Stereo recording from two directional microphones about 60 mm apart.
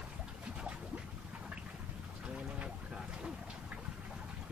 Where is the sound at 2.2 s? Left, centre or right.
Centre.